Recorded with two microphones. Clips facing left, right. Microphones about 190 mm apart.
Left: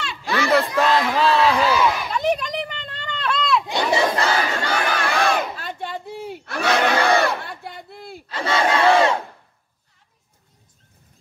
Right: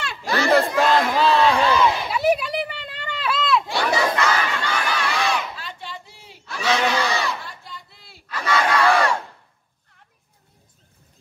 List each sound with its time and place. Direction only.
0.0 s battle cry: 40° right (ahead or behind)
0.7 s crowd: centre (ahead or behind)
2.0 s a sound: 10° right (ahead or behind)
3.6 s battle cry: 20° left (ahead or behind); by 8.2 s 55° left (ahead or behind)
8.3 s battle cry: 25° left (ahead or behind)